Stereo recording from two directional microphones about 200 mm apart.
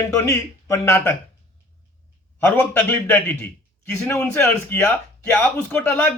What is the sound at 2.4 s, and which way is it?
Speech, 10° left (ahead or behind).